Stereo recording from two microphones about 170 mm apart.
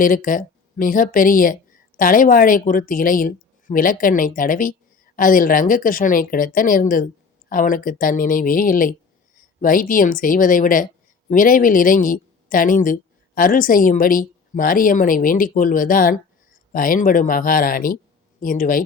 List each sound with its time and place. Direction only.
0.0 s a woman's voice: 55° left (ahead or behind)